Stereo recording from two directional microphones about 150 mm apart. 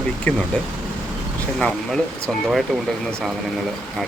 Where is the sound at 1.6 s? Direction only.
5° left (ahead or behind).